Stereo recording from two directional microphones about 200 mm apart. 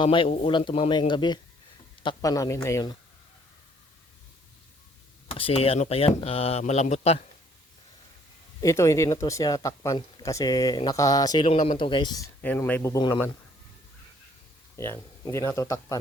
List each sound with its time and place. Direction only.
0.0 s speech: 25° left (ahead or behind)
5.3 s speech: 30° left (ahead or behind)
8.6 s speech: 15° left (ahead or behind)
12.4 s speech: 10° left (ahead or behind)
14.8 s speech: 15° left (ahead or behind)